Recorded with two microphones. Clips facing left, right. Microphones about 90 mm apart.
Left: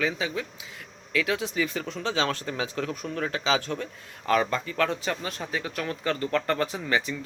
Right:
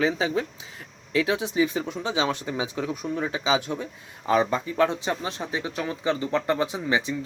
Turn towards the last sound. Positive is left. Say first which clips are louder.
# right 2 dB
turn(degrees=-15)  # may be behind; listen again after turning